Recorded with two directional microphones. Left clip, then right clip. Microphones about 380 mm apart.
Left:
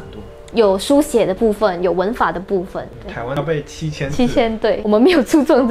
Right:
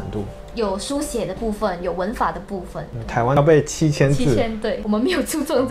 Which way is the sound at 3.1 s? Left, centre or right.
Right.